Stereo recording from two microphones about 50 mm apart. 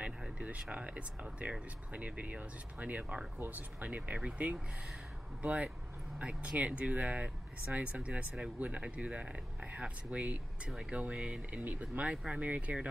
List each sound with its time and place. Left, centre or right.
0.2 s speech: right